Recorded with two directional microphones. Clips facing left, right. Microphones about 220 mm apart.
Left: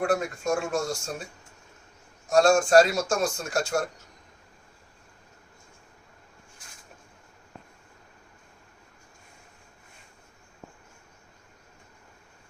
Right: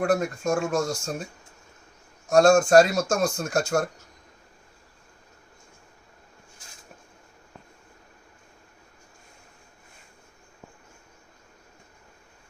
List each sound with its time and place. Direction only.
0.0 s speech: 40° right (ahead or behind)
2.3 s speech: 45° right (ahead or behind)